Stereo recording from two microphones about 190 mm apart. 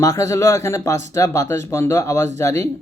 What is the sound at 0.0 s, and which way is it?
Speech, 15° left (ahead or behind).